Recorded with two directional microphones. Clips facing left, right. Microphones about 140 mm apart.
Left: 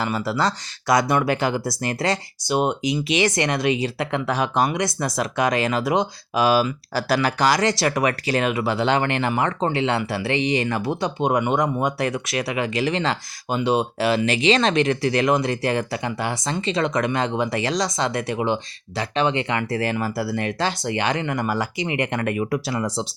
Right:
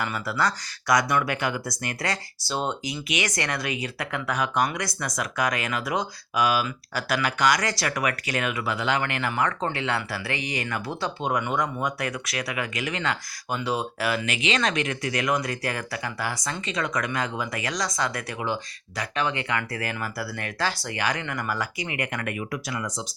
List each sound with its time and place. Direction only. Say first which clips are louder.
0.0 s speech: left 4 dB; 25° left (ahead or behind)